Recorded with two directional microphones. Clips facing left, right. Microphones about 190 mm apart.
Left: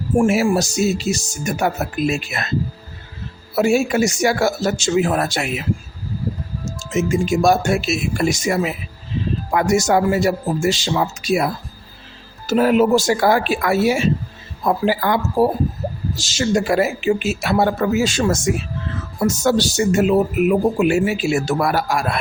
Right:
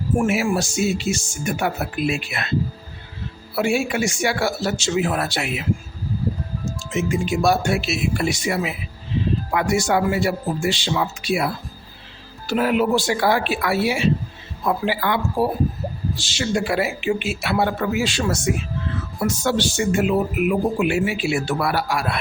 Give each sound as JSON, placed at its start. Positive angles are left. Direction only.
{"t": 0.2, "sound": "speech", "side_deg": 35}
{"t": 3.5, "sound": "speech", "side_deg": 40}
{"t": 6.7, "sound": "speech", "side_deg": 45}